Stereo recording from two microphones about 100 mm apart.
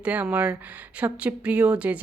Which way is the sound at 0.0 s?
15° right (ahead or behind).